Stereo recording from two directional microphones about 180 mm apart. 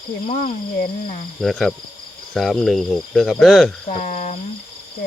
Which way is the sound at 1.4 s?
Centre (ahead or behind).